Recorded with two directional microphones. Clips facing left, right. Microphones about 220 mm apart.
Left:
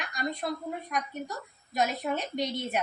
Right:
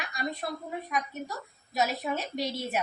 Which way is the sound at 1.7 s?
5° right (ahead or behind).